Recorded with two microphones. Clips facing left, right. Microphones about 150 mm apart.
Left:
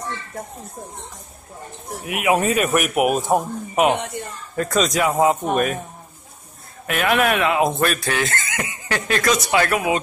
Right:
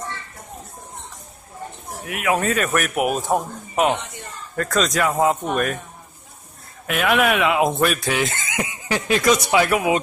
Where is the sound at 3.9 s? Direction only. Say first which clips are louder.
Left 3 dB; 55° left (ahead or behind).